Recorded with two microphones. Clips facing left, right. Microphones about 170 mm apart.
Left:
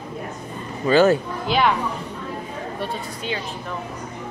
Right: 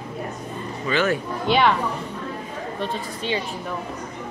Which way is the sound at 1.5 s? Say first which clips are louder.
Right 2 dB; centre (ahead or behind).